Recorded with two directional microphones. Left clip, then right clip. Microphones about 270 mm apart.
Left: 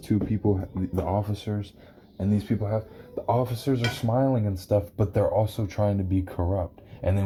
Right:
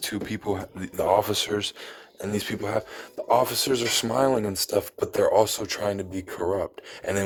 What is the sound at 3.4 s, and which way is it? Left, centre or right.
Speech, right.